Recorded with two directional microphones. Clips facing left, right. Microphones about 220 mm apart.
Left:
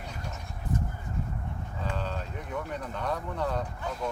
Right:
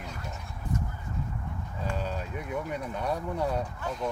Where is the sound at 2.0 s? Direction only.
10° right (ahead or behind).